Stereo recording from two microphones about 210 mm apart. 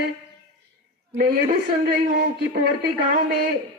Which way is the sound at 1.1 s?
40° right (ahead or behind).